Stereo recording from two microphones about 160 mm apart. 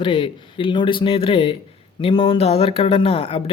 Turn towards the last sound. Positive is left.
turn(degrees=35)  # may be behind; listen again after turning